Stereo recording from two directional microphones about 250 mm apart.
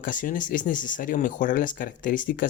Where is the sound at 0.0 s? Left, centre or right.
Left.